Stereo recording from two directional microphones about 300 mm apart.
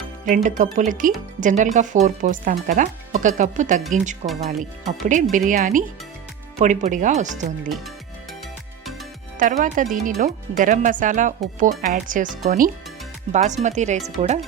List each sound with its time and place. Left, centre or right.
0.3 s speech: right
9.4 s speech: right